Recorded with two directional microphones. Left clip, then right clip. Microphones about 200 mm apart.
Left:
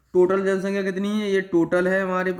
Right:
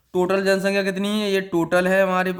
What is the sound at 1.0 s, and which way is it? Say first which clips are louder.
Speech: right 1 dB; 50° right (ahead or behind).